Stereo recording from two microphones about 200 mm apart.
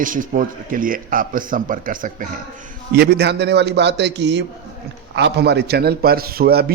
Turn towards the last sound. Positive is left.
turn(degrees=-50)  # may be behind; listen again after turning